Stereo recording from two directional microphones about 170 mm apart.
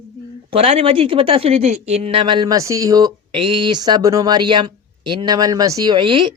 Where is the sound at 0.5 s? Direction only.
35° right (ahead or behind).